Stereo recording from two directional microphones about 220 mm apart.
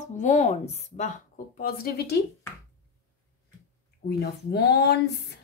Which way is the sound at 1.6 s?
45° left (ahead or behind).